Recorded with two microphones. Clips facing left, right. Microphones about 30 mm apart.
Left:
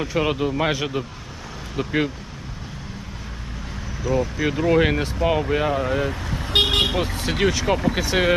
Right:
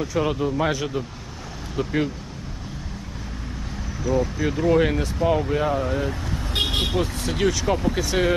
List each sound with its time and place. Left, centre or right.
0.0 s speech: left
4.0 s speech: centre
6.5 s vehicle: left
6.9 s speech: left